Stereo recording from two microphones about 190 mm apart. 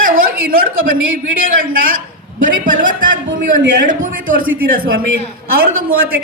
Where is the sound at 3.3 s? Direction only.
65° right (ahead or behind).